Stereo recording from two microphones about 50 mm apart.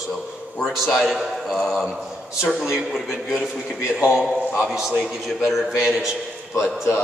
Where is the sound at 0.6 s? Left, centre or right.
Centre.